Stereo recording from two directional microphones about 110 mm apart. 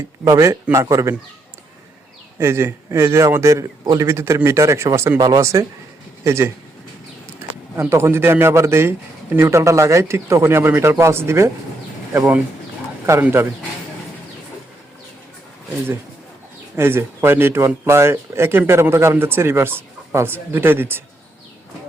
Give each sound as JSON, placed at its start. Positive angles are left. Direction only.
{"t": 0.3, "sound": "speech", "side_deg": -25}
{"t": 2.4, "sound": "speech", "side_deg": -25}
{"t": 7.8, "sound": "speech", "side_deg": -25}
{"t": 13.2, "sound": "speech", "side_deg": -15}
{"t": 16.7, "sound": "speech", "side_deg": -25}